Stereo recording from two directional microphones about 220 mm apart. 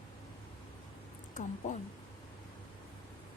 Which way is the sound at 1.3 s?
35° left (ahead or behind).